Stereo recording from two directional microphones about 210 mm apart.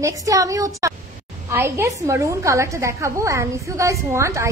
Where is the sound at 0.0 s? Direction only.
15° right (ahead or behind).